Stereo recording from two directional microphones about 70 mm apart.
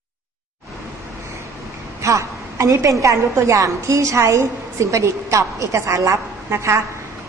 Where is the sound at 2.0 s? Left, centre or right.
Right.